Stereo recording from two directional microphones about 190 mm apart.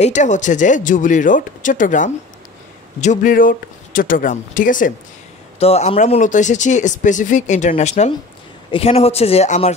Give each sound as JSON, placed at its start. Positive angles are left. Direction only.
{"t": 0.0, "sound": "speech", "side_deg": 40}
{"t": 5.6, "sound": "speech", "side_deg": 30}